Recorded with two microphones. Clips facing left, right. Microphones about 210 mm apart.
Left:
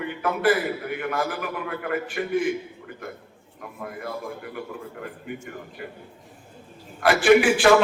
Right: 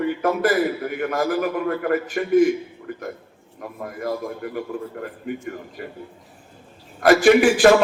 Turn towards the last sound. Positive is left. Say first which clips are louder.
# right 3 dB
turn(degrees=-40)  # may be behind; listen again after turning